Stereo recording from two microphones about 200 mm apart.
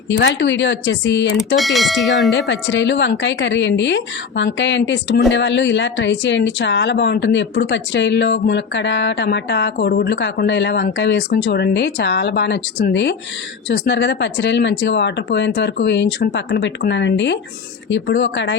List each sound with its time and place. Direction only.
0.1 s a woman's voice: 65° left (ahead or behind)
1.5 s speech: centre (ahead or behind)
2.3 s a woman's voice: 65° left (ahead or behind)